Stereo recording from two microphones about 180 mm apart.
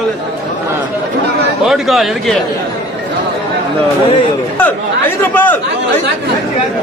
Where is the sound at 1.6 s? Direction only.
Centre (ahead or behind).